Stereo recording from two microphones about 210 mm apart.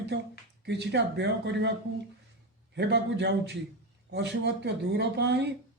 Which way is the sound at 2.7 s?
55° right (ahead or behind).